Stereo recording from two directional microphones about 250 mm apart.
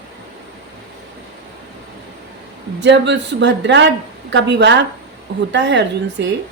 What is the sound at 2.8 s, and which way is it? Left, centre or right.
A woman's voice, right.